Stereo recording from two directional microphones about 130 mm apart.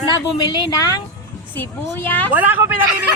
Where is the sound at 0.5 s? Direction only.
30° left (ahead or behind).